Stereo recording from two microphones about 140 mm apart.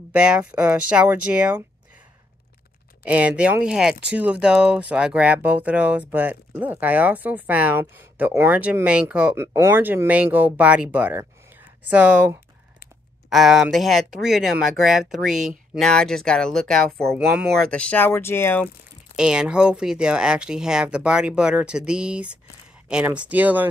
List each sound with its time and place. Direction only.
0.1 s speech: 10° right (ahead or behind)
3.0 s speech: 10° right (ahead or behind)
9.3 s speech: 20° right (ahead or behind)
13.3 s speech: 5° right (ahead or behind); by 18.7 s 15° left (ahead or behind)
19.1 s speech: 5° right (ahead or behind)